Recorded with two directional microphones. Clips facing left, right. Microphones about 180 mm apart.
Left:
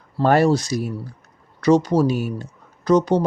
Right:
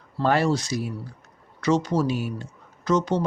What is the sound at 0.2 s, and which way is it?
Speech, 40° left (ahead or behind).